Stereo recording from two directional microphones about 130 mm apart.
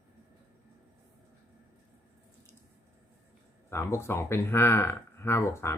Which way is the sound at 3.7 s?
20° left (ahead or behind).